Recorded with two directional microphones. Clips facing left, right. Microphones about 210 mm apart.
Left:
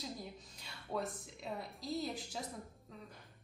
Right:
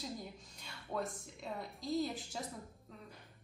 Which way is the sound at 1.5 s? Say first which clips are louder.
Right 2 dB; centre (ahead or behind).